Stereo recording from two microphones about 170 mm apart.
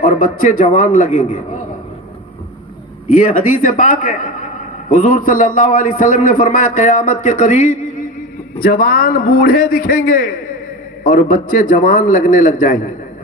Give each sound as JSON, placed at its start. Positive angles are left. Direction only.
{"t": 0.0, "sound": "a man's voice", "side_deg": 50}
{"t": 3.1, "sound": "a man's voice", "side_deg": 55}
{"t": 8.6, "sound": "a man's voice", "side_deg": 60}